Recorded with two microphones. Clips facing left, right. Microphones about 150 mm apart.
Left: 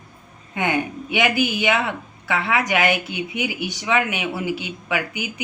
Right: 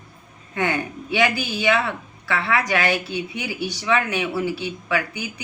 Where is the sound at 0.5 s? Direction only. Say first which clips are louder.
Left 1 dB; 20° left (ahead or behind).